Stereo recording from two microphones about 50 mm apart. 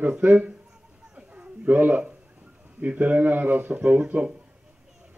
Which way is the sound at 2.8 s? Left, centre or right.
Right.